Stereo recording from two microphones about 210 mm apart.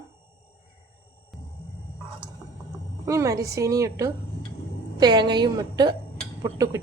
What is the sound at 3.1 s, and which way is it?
A woman's voice, 15° right (ahead or behind).